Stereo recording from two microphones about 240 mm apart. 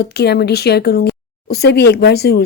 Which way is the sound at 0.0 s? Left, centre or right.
Left.